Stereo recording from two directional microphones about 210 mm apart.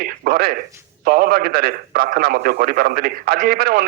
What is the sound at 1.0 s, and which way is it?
Speech, 45° right (ahead or behind).